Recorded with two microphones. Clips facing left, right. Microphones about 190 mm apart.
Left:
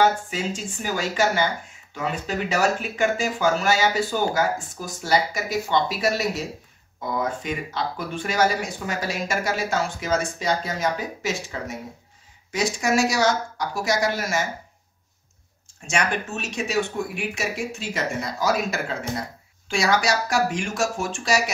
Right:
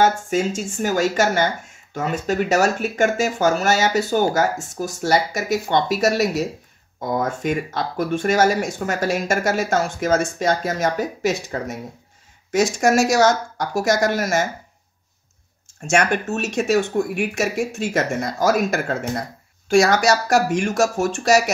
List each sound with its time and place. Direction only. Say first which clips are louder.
0.0 s speech: right 3 dB; 45° right (ahead or behind)
15.8 s speech: right 6 dB; 45° right (ahead or behind)